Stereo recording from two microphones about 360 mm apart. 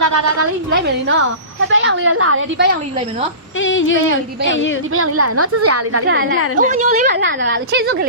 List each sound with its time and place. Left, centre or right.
0.0 s a woman's voice: right
1.6 s a woman's voice: right
3.6 s speech: left
4.9 s a woman's voice: right
6.6 s a woman's voice: centre